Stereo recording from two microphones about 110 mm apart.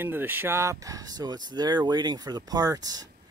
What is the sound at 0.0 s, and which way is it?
Speech, 20° right (ahead or behind).